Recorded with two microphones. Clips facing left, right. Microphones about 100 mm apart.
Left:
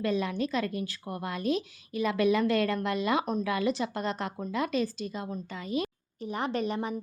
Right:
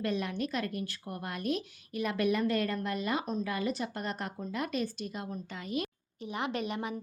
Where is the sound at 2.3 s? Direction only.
90° left.